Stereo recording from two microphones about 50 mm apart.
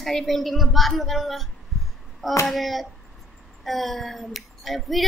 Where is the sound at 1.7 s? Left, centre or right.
Centre.